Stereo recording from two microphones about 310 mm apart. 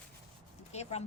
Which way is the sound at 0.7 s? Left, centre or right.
Left.